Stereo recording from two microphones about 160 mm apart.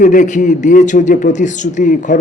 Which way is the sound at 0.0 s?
55° left (ahead or behind).